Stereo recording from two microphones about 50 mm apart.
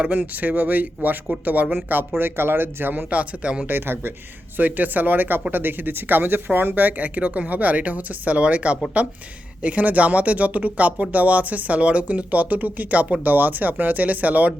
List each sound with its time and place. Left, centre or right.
0.1 s speech: right
3.1 s speech: right
3.7 s speech: right